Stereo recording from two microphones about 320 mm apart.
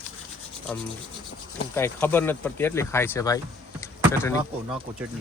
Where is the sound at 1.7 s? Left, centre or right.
Centre.